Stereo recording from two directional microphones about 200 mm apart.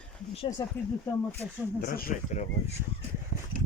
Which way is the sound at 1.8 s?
45° left (ahead or behind).